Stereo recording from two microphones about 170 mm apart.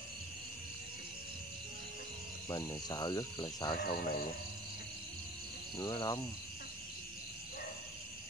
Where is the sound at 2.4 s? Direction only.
25° left (ahead or behind).